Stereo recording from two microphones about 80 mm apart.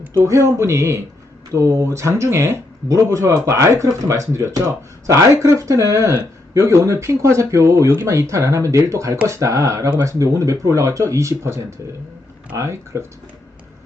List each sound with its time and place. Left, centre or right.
0.0 s speech: right